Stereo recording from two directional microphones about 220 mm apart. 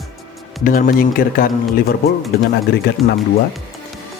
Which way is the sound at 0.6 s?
40° left (ahead or behind).